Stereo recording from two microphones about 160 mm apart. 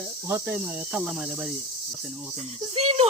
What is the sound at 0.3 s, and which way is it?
Speech, 10° right (ahead or behind).